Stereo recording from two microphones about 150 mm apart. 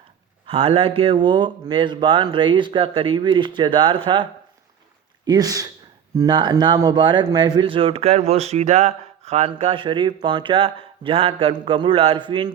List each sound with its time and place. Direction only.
0.4 s speech: 35° right (ahead or behind)